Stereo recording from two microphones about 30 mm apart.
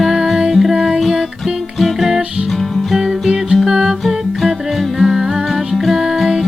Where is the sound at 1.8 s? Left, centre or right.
Centre.